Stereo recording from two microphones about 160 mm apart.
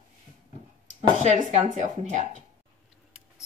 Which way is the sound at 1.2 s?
45° right (ahead or behind).